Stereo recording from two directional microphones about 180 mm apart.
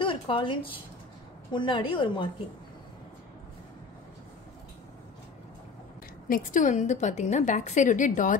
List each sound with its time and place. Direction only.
0.0 s a woman's voice: 30° left (ahead or behind)
6.2 s a woman's voice: 50° left (ahead or behind)